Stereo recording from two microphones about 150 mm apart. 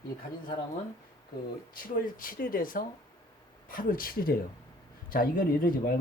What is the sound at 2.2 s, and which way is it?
Speech, 70° left (ahead or behind).